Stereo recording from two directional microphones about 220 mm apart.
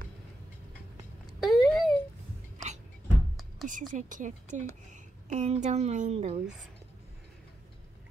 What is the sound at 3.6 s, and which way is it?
Speech, 35° right (ahead or behind).